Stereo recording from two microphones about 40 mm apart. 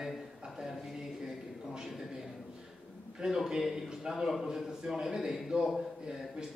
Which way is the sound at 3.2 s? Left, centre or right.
Centre.